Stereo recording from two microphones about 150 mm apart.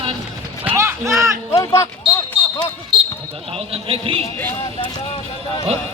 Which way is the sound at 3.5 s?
40° right (ahead or behind).